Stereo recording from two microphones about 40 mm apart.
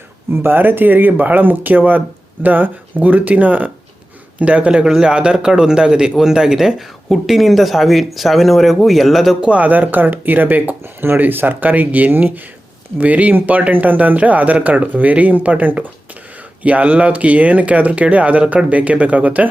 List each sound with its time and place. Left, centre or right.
0.3 s a man's voice: right
4.8 s a man's voice: centre
9.5 s speech: right
10.8 s speech: right
11.2 s speech: right